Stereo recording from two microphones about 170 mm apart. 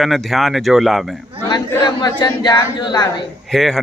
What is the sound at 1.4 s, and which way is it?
Chatter, 25° left (ahead or behind).